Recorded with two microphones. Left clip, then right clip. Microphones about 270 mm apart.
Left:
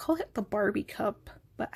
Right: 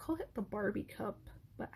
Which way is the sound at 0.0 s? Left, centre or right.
Left.